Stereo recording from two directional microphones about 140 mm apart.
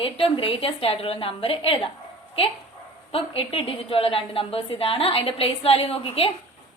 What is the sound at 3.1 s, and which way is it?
A woman's voice, 40° left (ahead or behind).